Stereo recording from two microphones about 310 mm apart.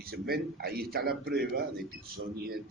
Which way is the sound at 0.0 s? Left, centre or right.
Right.